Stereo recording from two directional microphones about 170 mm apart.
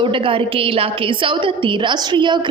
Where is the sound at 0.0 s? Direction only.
30° right (ahead or behind).